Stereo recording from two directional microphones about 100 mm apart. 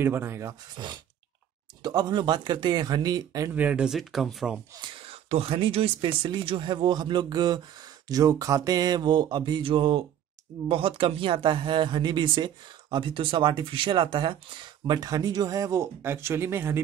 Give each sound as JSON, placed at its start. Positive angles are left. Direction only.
{"t": 0.0, "sound": "speech", "side_deg": -25}
{"t": 0.7, "sound": "speech", "side_deg": -50}
{"t": 3.5, "sound": "speech", "side_deg": -15}
{"t": 4.8, "sound": "speech", "side_deg": -70}